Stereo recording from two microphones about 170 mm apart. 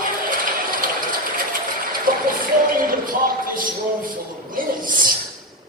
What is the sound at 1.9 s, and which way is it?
Music, 55° right (ahead or behind).